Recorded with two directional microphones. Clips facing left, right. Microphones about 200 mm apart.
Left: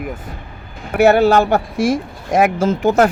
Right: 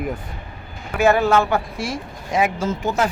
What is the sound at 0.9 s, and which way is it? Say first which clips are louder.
Speech: left 6 dB; 70° left (ahead or behind).